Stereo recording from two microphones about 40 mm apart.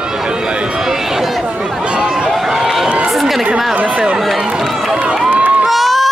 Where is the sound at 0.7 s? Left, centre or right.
Centre.